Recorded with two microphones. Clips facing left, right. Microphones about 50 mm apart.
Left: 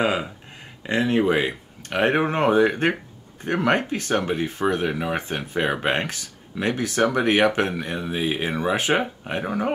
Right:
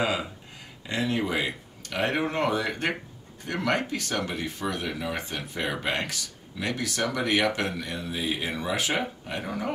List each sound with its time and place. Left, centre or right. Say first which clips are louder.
0.0 s speech: left 5 dB; left